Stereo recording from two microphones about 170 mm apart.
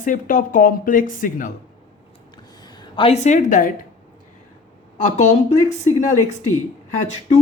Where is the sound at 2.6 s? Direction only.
25° left (ahead or behind); by 3.7 s 50° left (ahead or behind).